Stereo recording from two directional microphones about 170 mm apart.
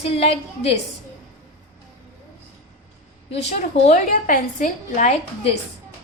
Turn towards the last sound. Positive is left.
turn(degrees=45)  # may be behind; listen again after turning